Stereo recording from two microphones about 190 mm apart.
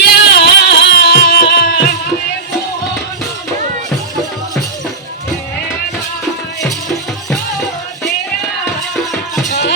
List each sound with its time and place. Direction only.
0.0 s music: 60° left (ahead or behind)